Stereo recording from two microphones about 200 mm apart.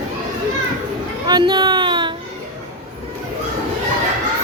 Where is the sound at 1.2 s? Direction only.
20° right (ahead or behind).